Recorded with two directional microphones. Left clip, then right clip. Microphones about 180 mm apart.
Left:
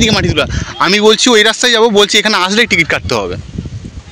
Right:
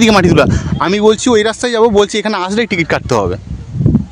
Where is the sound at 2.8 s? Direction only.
30° right (ahead or behind).